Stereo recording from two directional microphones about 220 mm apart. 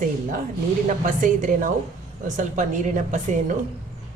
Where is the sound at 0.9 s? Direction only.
35° right (ahead or behind).